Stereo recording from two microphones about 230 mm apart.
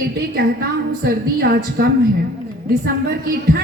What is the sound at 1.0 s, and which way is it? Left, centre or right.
A woman's voice, right.